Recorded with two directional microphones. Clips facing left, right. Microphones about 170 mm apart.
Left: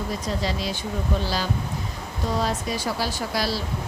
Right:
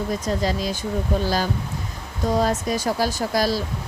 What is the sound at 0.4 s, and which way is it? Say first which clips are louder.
Speech: right 3 dB; 45° right (ahead or behind).